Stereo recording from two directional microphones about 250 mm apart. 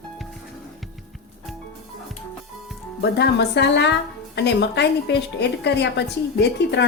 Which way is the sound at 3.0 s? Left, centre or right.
Left.